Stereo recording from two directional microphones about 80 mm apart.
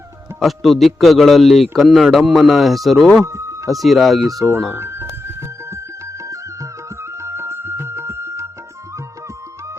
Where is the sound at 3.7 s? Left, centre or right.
Centre.